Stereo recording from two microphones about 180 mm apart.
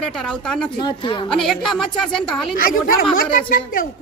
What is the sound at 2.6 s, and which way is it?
Speech, 50° left (ahead or behind).